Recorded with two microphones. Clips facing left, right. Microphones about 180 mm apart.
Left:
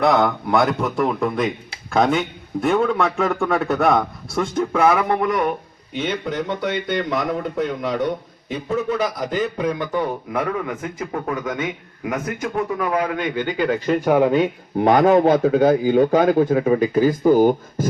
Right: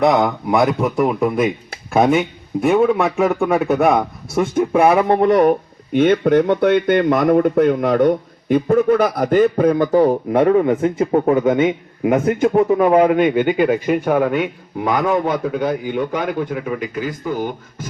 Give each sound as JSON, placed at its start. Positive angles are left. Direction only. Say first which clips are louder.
{"t": 0.4, "sound": "a man's voice", "louder": "right 3 dB", "side_deg": 0}
{"t": 3.8, "sound": "speech", "louder": "right 3 dB", "side_deg": -15}
{"t": 4.9, "sound": "speech", "louder": "right 5 dB", "side_deg": -30}
{"t": 14.0, "sound": "speech", "louder": "even", "side_deg": 10}
{"t": 14.3, "sound": "a man's voice", "louder": "left 2 dB", "side_deg": 30}